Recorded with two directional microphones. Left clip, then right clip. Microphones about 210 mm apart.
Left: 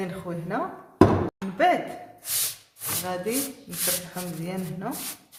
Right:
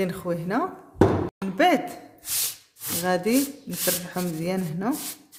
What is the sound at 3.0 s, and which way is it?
A man's voice, 55° right (ahead or behind).